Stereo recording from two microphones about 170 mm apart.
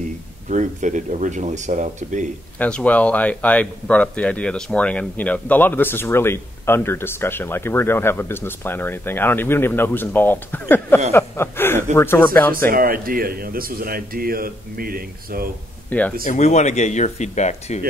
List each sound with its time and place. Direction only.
0.5 s speech: 45° right (ahead or behind)
2.6 s speech: 10° left (ahead or behind)
12.6 s speech: 60° right (ahead or behind)
15.9 s speech: 10° left (ahead or behind)
16.3 s speech: 45° left (ahead or behind)